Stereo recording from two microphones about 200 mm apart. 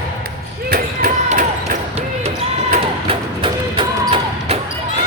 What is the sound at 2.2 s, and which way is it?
Music, 30° right (ahead or behind).